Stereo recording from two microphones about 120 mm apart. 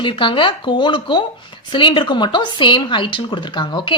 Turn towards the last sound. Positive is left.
turn(degrees=40)  # may be behind; listen again after turning